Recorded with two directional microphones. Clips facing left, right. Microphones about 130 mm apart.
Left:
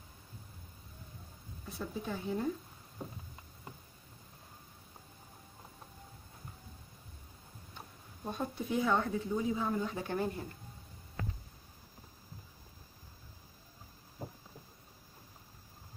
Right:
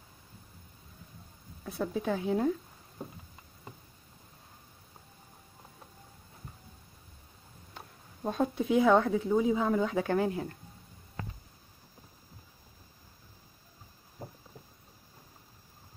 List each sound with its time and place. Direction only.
1.7 s a woman's voice: 70° right (ahead or behind)
8.3 s speech: 60° right (ahead or behind); by 10.0 s 90° right
10.0 s speech: 65° right (ahead or behind)